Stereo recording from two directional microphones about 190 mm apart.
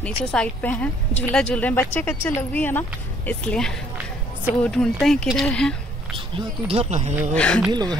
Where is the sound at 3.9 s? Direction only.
10° right (ahead or behind).